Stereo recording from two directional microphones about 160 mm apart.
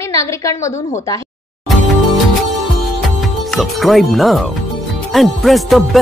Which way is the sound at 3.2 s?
Centre (ahead or behind).